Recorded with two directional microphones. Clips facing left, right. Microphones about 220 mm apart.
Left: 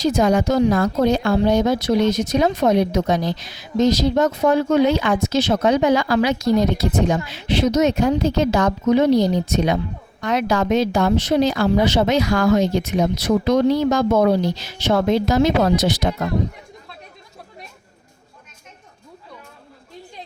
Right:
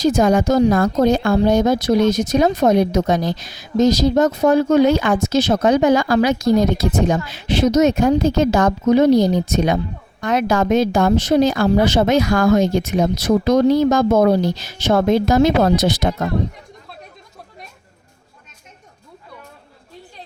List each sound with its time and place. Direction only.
0.0 s a woman's voice: 45° right (ahead or behind)